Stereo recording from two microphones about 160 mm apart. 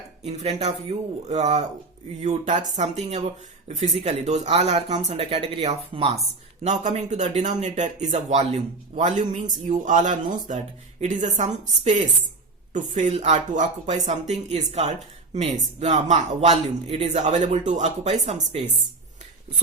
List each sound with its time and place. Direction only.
0.3 s speech: 40° right (ahead or behind)
6.6 s speech: 45° right (ahead or behind)